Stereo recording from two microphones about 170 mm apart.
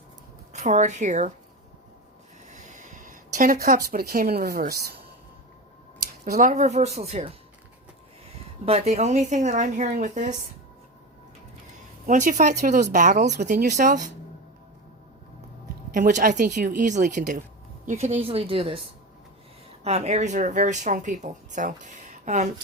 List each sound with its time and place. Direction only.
0.5 s speech: 40° right (ahead or behind)
2.6 s a sound: 50° right (ahead or behind)
3.3 s speech: 55° right (ahead or behind)
6.2 s speech: 60° right (ahead or behind)
6.5 s a woman's voice: 40° right (ahead or behind)
8.6 s speech: 40° right (ahead or behind)
12.0 s speech: 45° right (ahead or behind)
15.9 s a woman's voice: 50° right (ahead or behind)